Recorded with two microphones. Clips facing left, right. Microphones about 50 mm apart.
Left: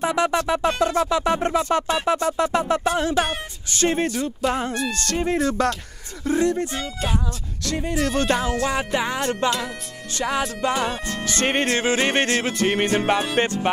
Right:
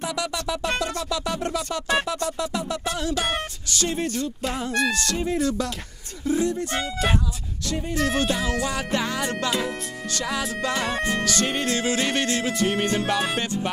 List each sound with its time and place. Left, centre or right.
0.0 s speech: left
7.6 s music: left
8.2 s speech: left
8.6 s music: left
11.2 s speech: left
13.1 s music: left